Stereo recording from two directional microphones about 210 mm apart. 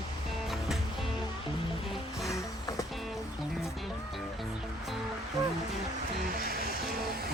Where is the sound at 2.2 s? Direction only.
15° left (ahead or behind).